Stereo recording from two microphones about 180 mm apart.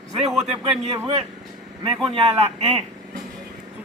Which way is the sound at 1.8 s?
30° right (ahead or behind).